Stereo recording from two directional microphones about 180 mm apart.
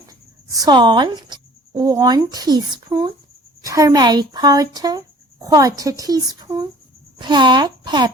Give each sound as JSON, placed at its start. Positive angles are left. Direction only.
{"t": 0.1, "sound": "speech", "side_deg": -20}